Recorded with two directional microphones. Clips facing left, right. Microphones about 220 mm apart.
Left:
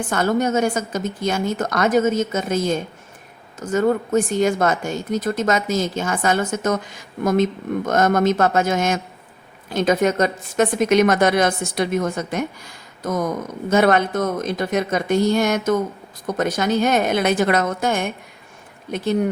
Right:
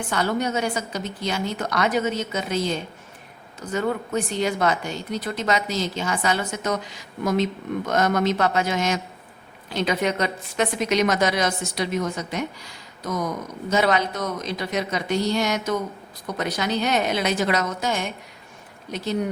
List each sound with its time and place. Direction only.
0.1 s a woman's voice: 45° left (ahead or behind)